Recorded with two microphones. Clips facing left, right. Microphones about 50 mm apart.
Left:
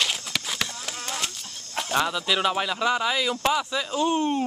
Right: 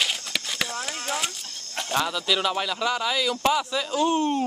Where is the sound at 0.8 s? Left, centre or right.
Centre.